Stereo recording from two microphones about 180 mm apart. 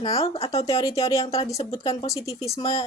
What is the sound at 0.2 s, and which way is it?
Speech, 35° left (ahead or behind).